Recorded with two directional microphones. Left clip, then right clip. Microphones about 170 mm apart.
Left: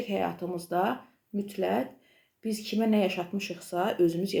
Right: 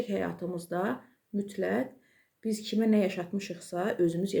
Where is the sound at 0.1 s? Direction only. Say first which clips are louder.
Left 3 dB; 20° right (ahead or behind).